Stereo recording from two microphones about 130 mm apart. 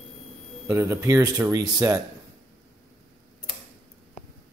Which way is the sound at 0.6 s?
20° right (ahead or behind).